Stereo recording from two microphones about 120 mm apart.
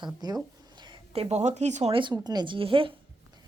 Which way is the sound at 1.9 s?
45° right (ahead or behind).